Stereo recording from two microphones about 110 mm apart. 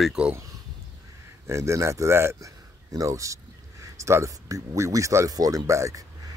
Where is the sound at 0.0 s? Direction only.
5° right (ahead or behind).